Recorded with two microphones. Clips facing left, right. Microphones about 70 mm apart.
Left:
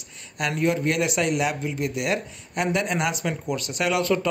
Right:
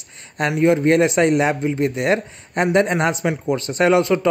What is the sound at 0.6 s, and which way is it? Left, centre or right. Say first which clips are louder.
Speech: right 9 dB; right.